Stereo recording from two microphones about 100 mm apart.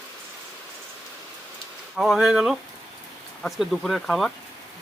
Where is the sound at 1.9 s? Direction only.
5° right (ahead or behind).